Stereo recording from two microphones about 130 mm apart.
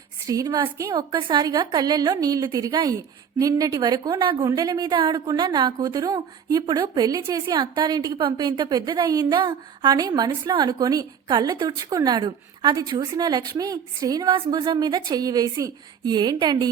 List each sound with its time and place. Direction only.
0.3 s a woman's voice: 30° right (ahead or behind)